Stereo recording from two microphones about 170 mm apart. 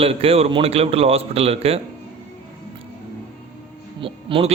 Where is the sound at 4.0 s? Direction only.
30° right (ahead or behind).